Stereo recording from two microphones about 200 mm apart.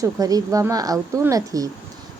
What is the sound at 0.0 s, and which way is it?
A woman's voice, 15° right (ahead or behind).